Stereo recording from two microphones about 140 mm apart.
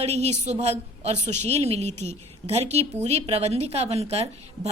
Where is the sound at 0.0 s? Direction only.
50° right (ahead or behind).